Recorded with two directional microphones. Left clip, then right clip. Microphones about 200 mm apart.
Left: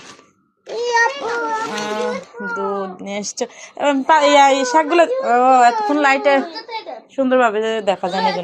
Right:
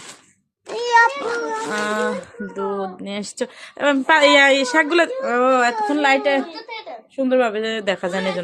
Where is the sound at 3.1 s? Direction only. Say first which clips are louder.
Left 4 dB; 70° right (ahead or behind).